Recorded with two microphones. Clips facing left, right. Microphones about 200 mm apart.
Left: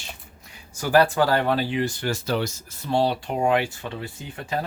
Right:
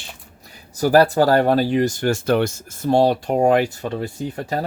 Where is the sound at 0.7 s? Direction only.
35° right (ahead or behind).